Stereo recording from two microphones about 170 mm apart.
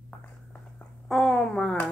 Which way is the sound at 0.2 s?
10° left (ahead or behind).